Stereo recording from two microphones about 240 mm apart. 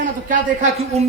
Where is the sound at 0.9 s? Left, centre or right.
Right.